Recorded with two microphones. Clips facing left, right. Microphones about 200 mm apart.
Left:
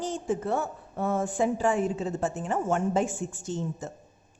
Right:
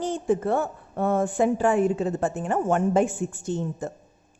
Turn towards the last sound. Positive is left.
turn(degrees=-55)  # may be behind; listen again after turning